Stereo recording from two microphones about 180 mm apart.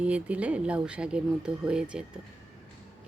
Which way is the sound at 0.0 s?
5° right (ahead or behind).